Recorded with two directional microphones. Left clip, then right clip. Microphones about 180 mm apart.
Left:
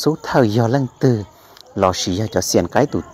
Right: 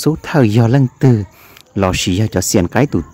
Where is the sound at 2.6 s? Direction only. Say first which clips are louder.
Right 1 dB; 20° right (ahead or behind).